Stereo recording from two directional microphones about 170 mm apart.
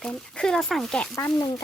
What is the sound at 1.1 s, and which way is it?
Speech, 15° left (ahead or behind).